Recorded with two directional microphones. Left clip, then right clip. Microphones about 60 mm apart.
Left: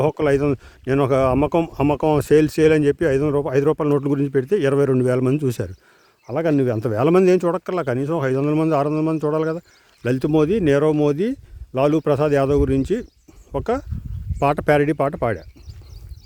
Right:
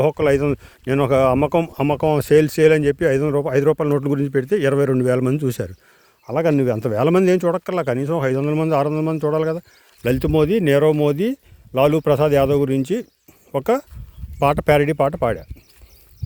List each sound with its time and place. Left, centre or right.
0.0 s a man's voice: left
1.7 s speech: left
2.3 s a man's voice: left
3.1 s a man's voice: left
4.7 s a man's voice: left
6.2 s speech: centre
6.7 s a man's voice: left
7.6 s speech: centre
8.4 s a man's voice: left
8.7 s a man's voice: left
10.2 s a man's voice: left
13.6 s speech: centre
14.3 s speech: left